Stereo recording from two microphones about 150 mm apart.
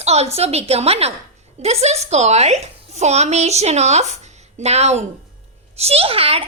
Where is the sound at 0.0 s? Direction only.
45° right (ahead or behind).